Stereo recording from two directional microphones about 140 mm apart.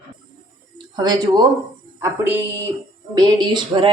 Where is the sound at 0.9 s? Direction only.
30° right (ahead or behind).